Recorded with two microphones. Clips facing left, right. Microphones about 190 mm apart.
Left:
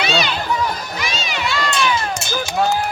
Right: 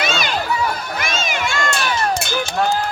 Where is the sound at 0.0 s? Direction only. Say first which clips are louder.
Left 2 dB; 45° right (ahead or behind).